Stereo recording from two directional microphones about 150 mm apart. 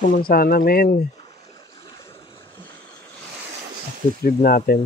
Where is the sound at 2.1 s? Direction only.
40° left (ahead or behind).